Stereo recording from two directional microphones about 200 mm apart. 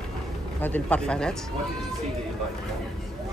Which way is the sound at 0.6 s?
5° left (ahead or behind).